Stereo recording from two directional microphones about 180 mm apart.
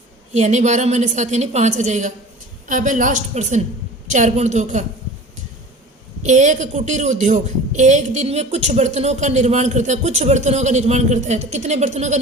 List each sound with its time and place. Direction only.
0.3 s a woman's voice: 40° right (ahead or behind)
6.2 s a woman's voice: 40° right (ahead or behind)